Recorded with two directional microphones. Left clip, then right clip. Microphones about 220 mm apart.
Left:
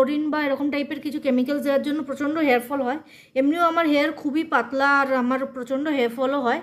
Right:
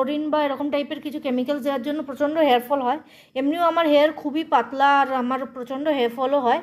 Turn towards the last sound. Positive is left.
turn(degrees=10)  # may be behind; listen again after turning